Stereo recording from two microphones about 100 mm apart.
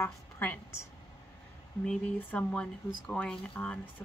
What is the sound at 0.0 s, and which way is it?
Speech, 20° left (ahead or behind).